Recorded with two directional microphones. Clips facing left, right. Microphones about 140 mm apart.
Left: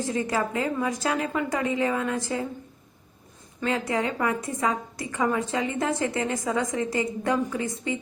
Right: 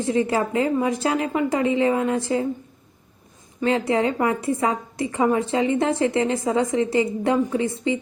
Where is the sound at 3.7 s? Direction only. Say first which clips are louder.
Right 6 dB; 30° right (ahead or behind).